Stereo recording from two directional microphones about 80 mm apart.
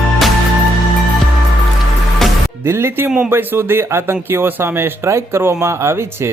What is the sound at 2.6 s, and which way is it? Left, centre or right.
A man's voice, right.